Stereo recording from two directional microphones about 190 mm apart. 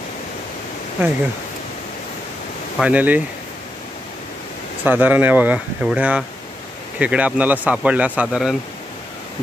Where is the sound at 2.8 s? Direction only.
10° right (ahead or behind).